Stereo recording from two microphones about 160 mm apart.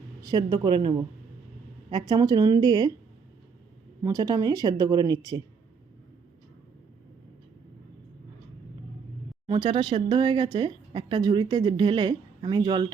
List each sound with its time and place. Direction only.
0.2 s speech: 25° right (ahead or behind)
4.0 s speech: 20° right (ahead or behind)
9.5 s speech: 30° right (ahead or behind)